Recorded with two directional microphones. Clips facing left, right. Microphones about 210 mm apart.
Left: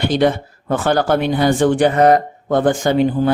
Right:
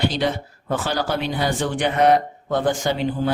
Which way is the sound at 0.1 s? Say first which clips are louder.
Left 8 dB; 55° left (ahead or behind).